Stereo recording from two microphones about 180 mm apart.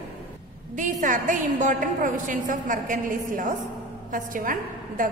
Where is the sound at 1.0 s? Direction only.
45° right (ahead or behind).